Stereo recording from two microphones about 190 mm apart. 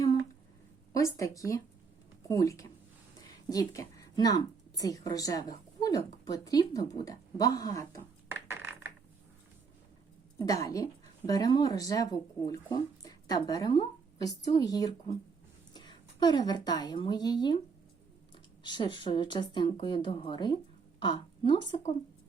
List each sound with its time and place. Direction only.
0.9 s a woman's voice: 15° left (ahead or behind)
8.3 s coin: 10° right (ahead or behind)
10.3 s a woman's voice: 20° left (ahead or behind)
18.6 s a woman's voice: 25° left (ahead or behind)